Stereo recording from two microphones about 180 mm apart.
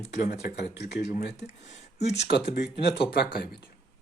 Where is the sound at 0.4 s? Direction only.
60° left (ahead or behind).